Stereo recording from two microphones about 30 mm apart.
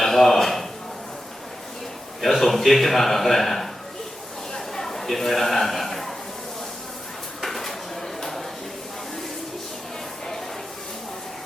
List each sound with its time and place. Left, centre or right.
0.0 s speech: centre
2.2 s a man's voice: centre
4.5 s a sound: centre
4.9 s a man's voice: centre
7.4 s dishes: centre
8.2 s a sound: centre